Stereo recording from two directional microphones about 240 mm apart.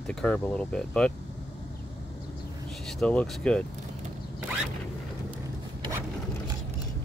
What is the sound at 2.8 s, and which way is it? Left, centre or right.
Speech, centre.